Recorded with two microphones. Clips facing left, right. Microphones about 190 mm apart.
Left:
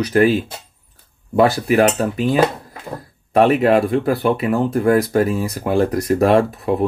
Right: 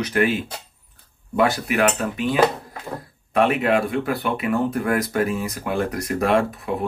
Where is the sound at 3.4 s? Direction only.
35° left (ahead or behind).